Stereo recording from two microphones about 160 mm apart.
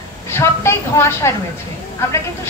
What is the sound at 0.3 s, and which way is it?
A woman's voice, 15° left (ahead or behind).